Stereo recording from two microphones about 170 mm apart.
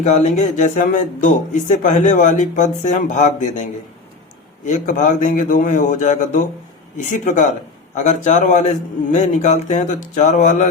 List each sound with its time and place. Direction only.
0.0 s speech: 40° left (ahead or behind)